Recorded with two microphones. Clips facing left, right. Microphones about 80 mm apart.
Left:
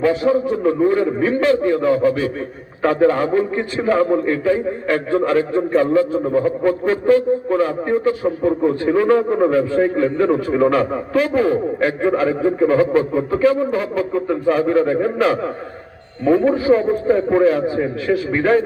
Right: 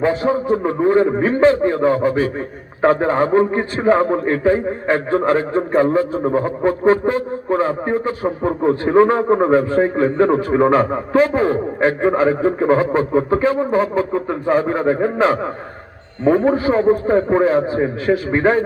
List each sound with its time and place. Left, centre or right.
0.0 s a man's voice: right